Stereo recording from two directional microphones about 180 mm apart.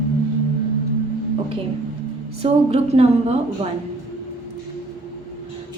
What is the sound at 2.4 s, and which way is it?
Speech, 35° right (ahead or behind).